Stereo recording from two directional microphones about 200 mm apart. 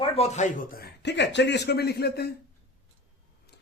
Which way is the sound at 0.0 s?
35° left (ahead or behind).